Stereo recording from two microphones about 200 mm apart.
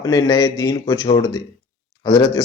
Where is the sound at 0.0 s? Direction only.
20° left (ahead or behind).